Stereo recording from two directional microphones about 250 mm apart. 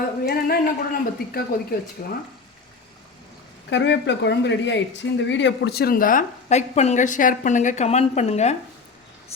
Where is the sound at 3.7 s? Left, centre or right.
Left.